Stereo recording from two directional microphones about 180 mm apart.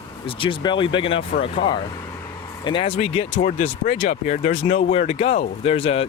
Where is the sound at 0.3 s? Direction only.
30° left (ahead or behind).